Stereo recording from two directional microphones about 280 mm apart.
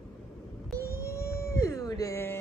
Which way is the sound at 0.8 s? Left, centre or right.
Centre.